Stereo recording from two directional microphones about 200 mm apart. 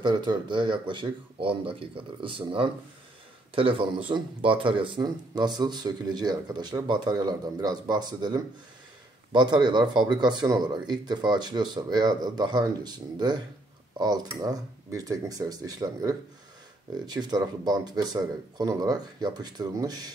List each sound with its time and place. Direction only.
0.0 s speech: 20° right (ahead or behind)